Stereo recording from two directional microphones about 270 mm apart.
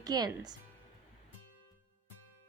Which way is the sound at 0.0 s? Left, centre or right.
Centre.